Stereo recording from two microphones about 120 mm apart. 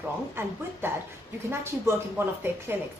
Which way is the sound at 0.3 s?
20° right (ahead or behind).